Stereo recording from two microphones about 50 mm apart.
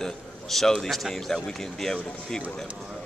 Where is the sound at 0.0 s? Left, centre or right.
Centre.